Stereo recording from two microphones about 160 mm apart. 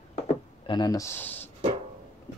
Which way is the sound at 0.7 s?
20° left (ahead or behind).